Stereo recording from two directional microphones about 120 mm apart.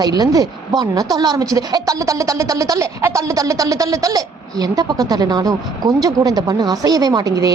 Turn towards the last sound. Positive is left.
turn(degrees=-30)  # may be behind; listen again after turning